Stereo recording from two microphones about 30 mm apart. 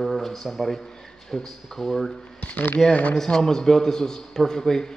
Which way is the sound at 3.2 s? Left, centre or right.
Centre.